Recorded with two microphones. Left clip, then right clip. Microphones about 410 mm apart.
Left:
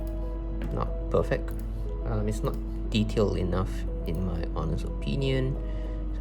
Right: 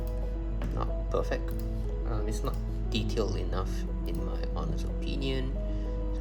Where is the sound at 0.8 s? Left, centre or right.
Centre.